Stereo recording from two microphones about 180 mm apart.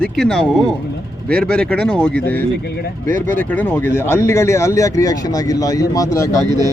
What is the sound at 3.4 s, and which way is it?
Speech, 10° left (ahead or behind).